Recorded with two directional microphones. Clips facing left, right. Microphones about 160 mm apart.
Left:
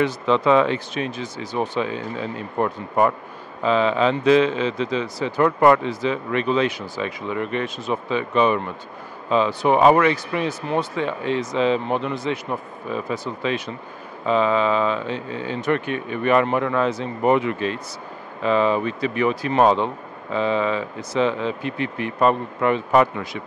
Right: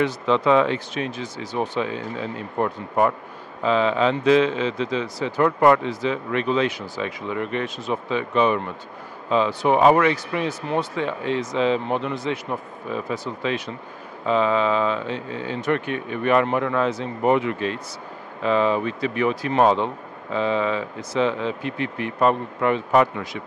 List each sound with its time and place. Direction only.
0.0 s speech: 15° left (ahead or behind)
9.7 s speech: 15° left (ahead or behind)